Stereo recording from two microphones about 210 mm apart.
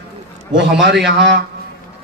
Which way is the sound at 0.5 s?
55° right (ahead or behind).